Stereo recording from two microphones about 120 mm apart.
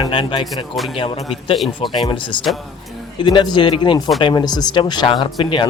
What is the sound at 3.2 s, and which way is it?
Speech, 40° left (ahead or behind).